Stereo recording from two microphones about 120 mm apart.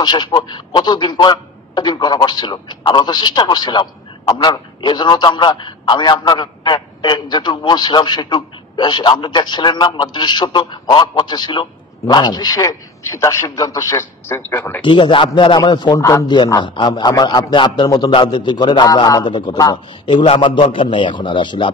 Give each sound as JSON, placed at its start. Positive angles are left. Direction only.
{"t": 0.0, "sound": "a man's voice", "side_deg": 35}
{"t": 14.8, "sound": "a man's voice", "side_deg": 45}
{"t": 16.6, "sound": "a man's voice", "side_deg": 40}